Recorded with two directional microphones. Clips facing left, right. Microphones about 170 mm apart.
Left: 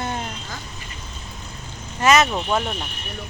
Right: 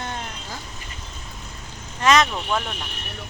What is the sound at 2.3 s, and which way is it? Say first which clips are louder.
Speech: left 3 dB; 20° left (ahead or behind).